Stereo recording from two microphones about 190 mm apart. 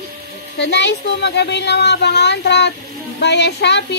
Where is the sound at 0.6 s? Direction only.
65° left (ahead or behind).